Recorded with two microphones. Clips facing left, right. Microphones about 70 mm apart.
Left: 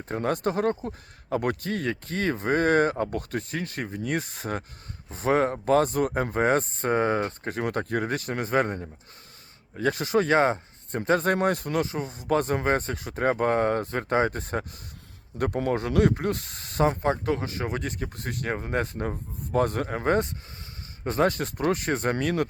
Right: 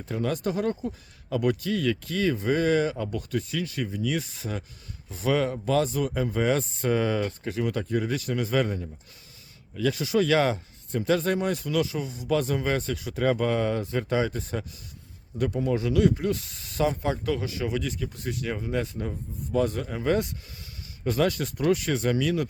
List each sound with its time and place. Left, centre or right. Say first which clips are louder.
0.0 s speech: left 2 dB; left